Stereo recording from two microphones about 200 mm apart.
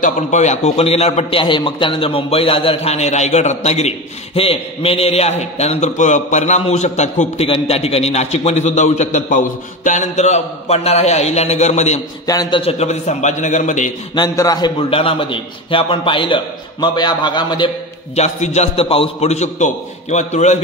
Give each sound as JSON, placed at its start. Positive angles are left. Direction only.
{"t": 0.0, "sound": "a man's voice", "side_deg": 35}
{"t": 12.3, "sound": "a man's voice", "side_deg": 20}
{"t": 14.1, "sound": "a man's voice", "side_deg": 20}
{"t": 18.1, "sound": "a man's voice", "side_deg": 35}